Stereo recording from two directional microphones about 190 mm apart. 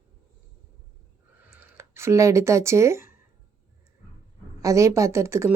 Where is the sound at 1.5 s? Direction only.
15° right (ahead or behind).